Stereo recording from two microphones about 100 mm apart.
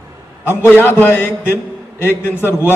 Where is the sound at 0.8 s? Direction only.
20° left (ahead or behind).